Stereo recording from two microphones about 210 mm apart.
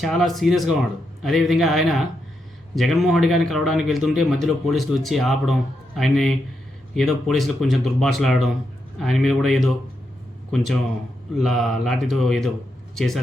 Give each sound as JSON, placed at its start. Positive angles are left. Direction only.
{"t": 0.0, "sound": "a man's voice", "side_deg": 0}